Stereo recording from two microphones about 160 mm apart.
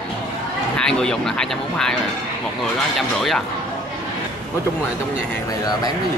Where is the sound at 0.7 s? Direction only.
5° left (ahead or behind).